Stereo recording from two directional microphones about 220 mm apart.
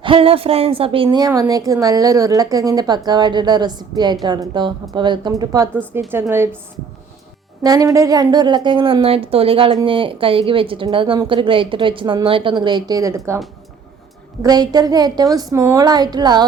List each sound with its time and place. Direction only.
0.0 s a woman's voice: 25° right (ahead or behind)
7.6 s a woman's voice: 15° right (ahead or behind)
14.4 s a woman's voice: 15° right (ahead or behind)